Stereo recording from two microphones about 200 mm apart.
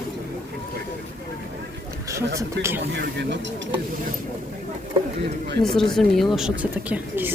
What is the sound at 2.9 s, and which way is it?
Speech, 60° right (ahead or behind).